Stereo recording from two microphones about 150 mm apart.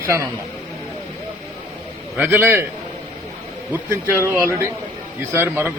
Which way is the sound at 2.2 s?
15° right (ahead or behind).